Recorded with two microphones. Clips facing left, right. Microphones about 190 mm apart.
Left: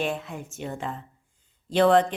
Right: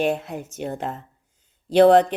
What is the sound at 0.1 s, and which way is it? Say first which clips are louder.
Speech: right 6 dB; 60° right (ahead or behind).